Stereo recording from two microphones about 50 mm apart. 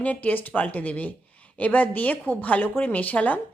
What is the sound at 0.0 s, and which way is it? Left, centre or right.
A woman's voice, left.